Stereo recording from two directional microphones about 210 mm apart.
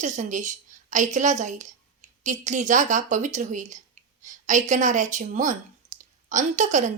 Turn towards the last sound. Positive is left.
turn(degrees=-35)  # may be behind; listen again after turning